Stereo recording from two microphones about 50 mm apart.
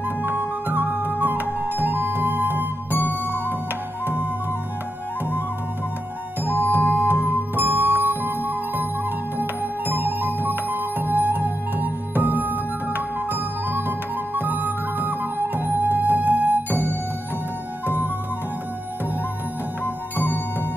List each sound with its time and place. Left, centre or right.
0.2 s music: right
6.7 s music: right